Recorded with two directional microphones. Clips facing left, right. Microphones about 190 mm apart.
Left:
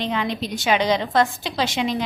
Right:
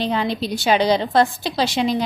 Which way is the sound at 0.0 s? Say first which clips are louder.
Right 3 dB; 35° right (ahead or behind).